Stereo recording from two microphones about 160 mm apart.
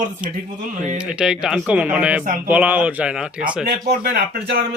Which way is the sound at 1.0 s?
5° right (ahead or behind).